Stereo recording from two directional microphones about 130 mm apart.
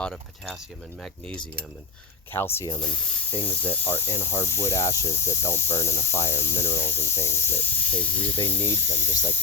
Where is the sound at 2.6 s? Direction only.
35° left (ahead or behind).